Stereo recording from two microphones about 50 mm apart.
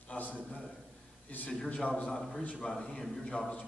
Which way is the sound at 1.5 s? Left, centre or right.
Centre.